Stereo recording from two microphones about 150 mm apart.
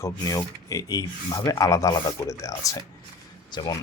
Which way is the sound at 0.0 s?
25° left (ahead or behind).